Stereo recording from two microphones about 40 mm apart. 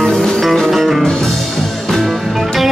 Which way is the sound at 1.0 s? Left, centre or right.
Centre.